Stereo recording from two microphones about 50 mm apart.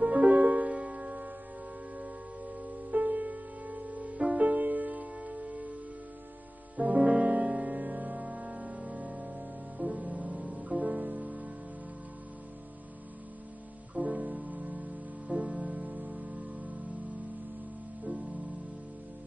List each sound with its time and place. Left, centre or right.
0.0 s music: right
2.6 s music: right
6.8 s music: right
13.9 s music: right
18.0 s music: right